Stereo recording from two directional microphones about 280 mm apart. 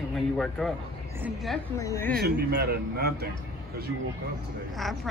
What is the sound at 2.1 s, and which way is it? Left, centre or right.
A man's voice, right.